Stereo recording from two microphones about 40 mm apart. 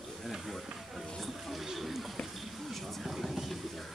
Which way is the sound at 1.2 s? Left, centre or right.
Centre.